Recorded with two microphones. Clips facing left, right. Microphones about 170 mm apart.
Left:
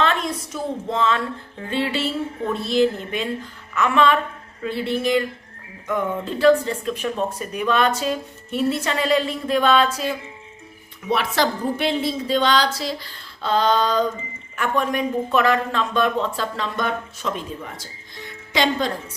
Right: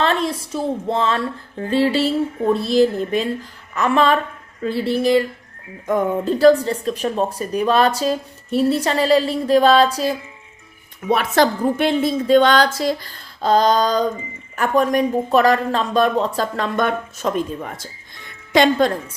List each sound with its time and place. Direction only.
0.0 s speech: 35° right (ahead or behind)
11.1 s a woman's voice: 50° right (ahead or behind)